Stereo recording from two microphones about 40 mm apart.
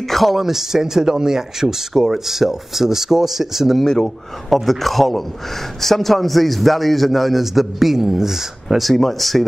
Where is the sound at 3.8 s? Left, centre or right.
Centre.